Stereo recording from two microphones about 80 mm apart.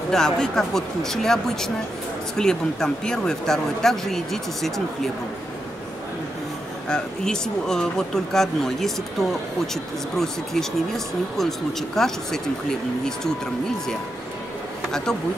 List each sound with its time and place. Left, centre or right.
0.1 s speech: centre
6.9 s speech: centre
10.1 s speech: centre
14.9 s speech: centre